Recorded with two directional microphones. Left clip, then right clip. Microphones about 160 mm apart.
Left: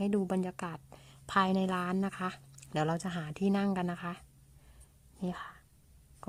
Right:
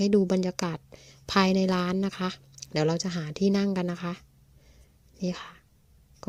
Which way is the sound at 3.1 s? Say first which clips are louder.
Right 6 dB; 40° right (ahead or behind).